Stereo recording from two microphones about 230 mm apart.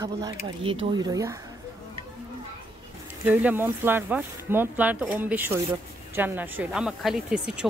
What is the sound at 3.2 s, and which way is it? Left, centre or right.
Speech, centre.